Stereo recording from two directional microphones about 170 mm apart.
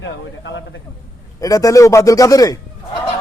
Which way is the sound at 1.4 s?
20° left (ahead or behind).